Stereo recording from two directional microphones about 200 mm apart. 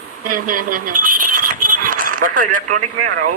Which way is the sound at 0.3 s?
45° right (ahead or behind).